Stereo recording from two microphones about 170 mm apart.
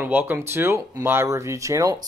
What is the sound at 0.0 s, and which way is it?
Speech, 10° right (ahead or behind).